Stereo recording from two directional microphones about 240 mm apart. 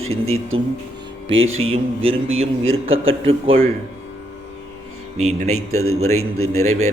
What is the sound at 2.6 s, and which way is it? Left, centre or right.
Speech, right.